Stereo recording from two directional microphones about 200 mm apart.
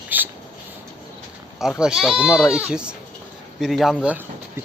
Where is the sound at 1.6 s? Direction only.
5° right (ahead or behind).